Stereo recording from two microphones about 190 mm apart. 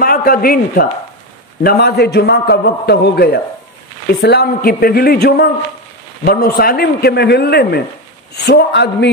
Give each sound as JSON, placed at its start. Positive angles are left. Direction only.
{"t": 0.0, "sound": "a man's voice", "side_deg": 50}